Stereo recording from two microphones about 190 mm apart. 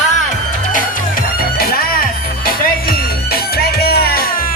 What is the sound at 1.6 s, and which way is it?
Music, 50° left (ahead or behind).